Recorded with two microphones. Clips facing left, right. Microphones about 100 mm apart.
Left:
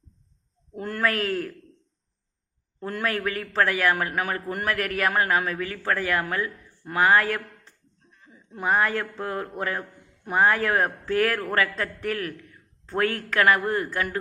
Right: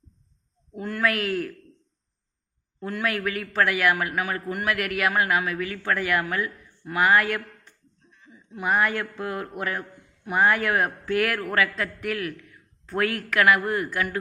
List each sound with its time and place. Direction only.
0.8 s a man's voice: 45° left (ahead or behind)
2.8 s a man's voice: 40° left (ahead or behind)